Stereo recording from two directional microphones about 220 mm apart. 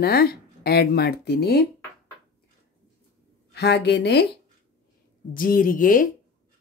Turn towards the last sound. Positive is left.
turn(degrees=40)  # may be behind; listen again after turning